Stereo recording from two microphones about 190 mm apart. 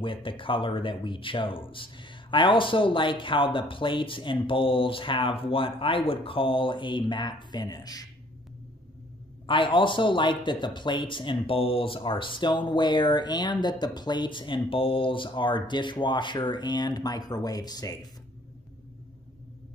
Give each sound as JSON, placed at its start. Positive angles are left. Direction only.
{"t": 0.0, "sound": "speech", "side_deg": 25}
{"t": 9.5, "sound": "speech", "side_deg": 25}